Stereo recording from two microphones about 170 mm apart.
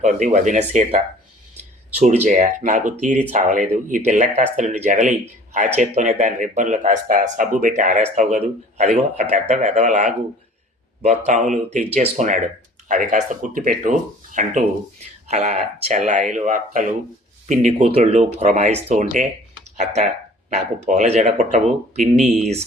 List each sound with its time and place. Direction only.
0.0 s speech: 45° right (ahead or behind)
2.2 s speech: 45° right (ahead or behind)